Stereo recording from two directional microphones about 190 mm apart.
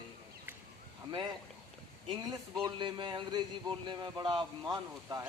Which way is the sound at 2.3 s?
20° right (ahead or behind).